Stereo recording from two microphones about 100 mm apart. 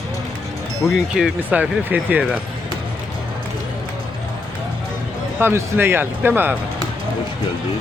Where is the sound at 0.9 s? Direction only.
5° right (ahead or behind).